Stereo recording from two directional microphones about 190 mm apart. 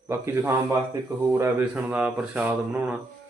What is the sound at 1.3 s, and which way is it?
Speech, 10° right (ahead or behind).